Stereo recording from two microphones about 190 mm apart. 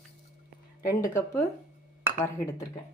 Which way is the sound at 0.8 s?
15° left (ahead or behind).